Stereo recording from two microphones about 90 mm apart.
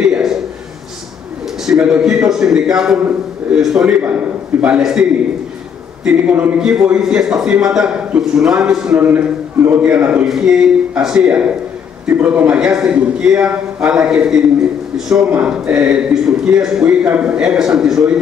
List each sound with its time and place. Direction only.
0.0 s a sound: 5° right (ahead or behind)
1.7 s a man's voice: 10° right (ahead or behind)
6.0 s a man's voice: 10° right (ahead or behind)
8.9 s a man's voice: 20° right (ahead or behind)
10.2 s a man's voice: 5° right (ahead or behind)